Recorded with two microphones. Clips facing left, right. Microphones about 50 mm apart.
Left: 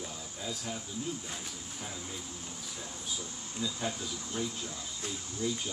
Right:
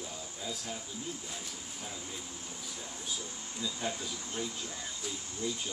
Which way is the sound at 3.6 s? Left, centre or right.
Left.